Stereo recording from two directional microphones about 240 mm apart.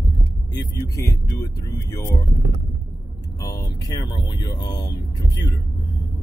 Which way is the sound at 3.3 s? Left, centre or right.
Centre.